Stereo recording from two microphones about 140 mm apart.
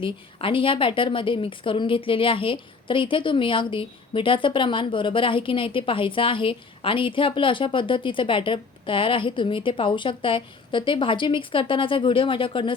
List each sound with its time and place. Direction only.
0.0 s a woman's voice: 40° left (ahead or behind)